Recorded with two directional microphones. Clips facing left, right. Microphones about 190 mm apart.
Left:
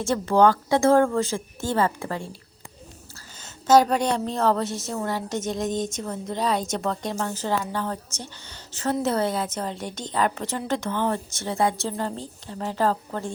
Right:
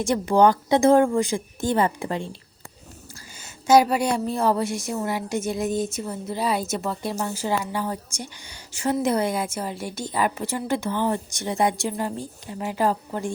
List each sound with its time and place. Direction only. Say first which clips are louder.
0.0 s a woman's voice: right 1 dB; 15° right (ahead or behind)
3.4 s a woman's voice: even; 10° right (ahead or behind)